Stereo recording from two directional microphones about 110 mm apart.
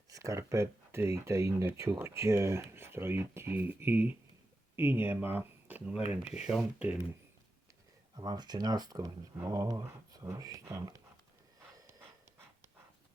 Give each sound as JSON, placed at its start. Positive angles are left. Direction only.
{"t": 0.1, "sound": "speech", "side_deg": -30}
{"t": 8.1, "sound": "speech", "side_deg": -40}